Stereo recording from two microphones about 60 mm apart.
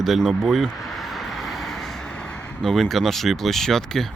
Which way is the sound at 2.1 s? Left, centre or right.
Left.